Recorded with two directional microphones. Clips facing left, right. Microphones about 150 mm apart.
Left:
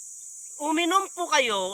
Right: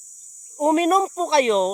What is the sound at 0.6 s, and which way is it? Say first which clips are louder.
Speech: right 7 dB; 35° right (ahead or behind).